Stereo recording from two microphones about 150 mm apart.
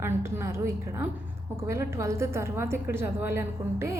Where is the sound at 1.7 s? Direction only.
20° right (ahead or behind).